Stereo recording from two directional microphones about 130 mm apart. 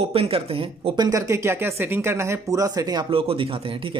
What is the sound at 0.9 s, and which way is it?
Speech, 25° right (ahead or behind).